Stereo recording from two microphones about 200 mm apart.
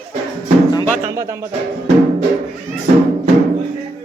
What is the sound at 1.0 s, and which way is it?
Speech, 15° right (ahead or behind).